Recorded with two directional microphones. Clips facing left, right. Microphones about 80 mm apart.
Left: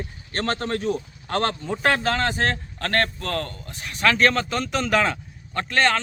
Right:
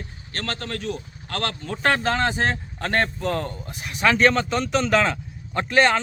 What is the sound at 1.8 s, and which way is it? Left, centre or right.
Speech, centre.